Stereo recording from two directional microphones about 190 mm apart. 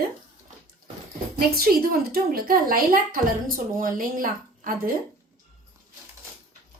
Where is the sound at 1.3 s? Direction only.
50° right (ahead or behind).